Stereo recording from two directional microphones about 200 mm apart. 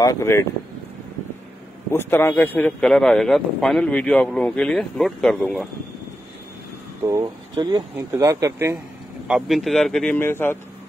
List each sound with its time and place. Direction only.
0.0 s speech: 15° left (ahead or behind)
1.9 s speech: 10° left (ahead or behind)
7.1 s speech: 15° right (ahead or behind)
9.3 s speech: centre (ahead or behind)